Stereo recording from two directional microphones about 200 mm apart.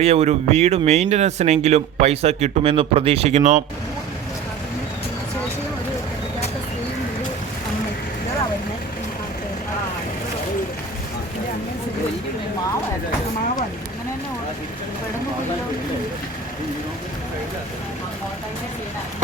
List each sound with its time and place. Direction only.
0.0 s speech: 30° right (ahead or behind)